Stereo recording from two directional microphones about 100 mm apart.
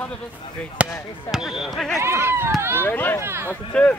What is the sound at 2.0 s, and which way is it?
Speech, 25° right (ahead or behind).